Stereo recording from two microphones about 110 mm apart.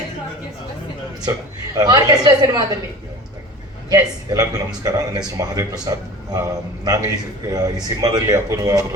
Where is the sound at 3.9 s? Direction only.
35° right (ahead or behind).